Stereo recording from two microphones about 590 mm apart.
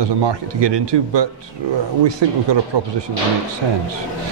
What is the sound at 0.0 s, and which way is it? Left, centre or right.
Speech, right.